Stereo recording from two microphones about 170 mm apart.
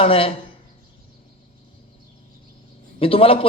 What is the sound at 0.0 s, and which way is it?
Speech, 35° left (ahead or behind).